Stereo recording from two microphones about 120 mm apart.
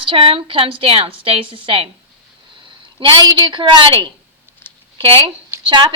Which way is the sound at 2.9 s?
40° right (ahead or behind).